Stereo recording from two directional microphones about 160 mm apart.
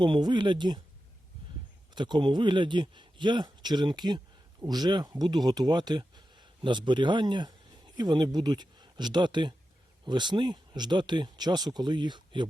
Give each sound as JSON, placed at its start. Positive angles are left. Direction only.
{"t": 0.0, "sound": "speech", "side_deg": -30}
{"t": 2.0, "sound": "speech", "side_deg": -30}